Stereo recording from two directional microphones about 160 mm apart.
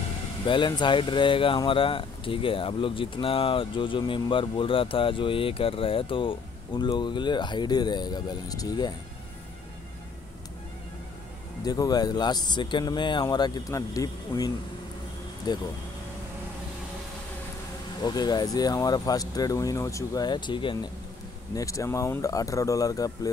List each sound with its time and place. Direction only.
0.5 s speech: 30° left (ahead or behind)
11.6 s speech: 25° left (ahead or behind)
18.0 s speech: 25° left (ahead or behind)